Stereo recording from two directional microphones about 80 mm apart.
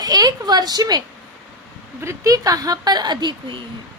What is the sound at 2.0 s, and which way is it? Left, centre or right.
Speech, right.